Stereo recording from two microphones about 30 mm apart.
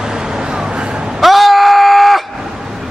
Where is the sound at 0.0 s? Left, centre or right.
Right.